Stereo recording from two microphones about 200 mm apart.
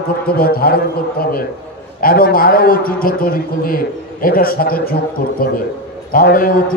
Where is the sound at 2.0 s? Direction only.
50° left (ahead or behind).